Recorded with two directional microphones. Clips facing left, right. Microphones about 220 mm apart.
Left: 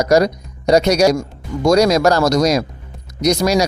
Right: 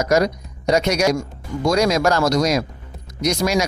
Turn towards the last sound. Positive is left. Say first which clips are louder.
# left 4 dB
turn(degrees=35)  # may be behind; listen again after turning